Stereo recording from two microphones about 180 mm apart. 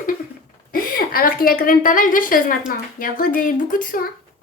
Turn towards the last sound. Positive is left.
turn(degrees=50)  # may be behind; listen again after turning